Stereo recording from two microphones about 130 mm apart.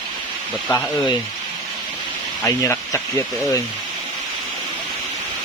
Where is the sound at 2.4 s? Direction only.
20° left (ahead or behind).